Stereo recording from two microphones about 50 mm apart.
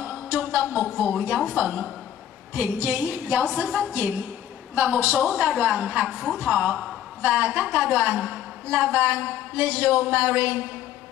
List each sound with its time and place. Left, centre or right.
0.3 s a sound: right
1.1 s a woman's voice: right
2.8 s a woman's voice: right
3.1 s a woman's voice: right
5.3 s a woman's voice: right
6.0 s a woman's voice: centre
6.4 s a woman's voice: right